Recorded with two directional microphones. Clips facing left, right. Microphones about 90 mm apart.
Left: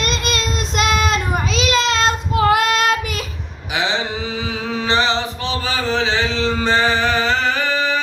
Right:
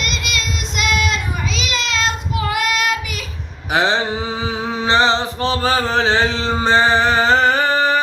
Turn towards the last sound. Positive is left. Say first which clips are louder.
# right 4 dB
turn(degrees=-45)  # may be behind; listen again after turning